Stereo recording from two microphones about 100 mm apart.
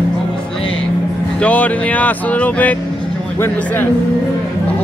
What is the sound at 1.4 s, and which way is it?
A man's voice, 15° left (ahead or behind).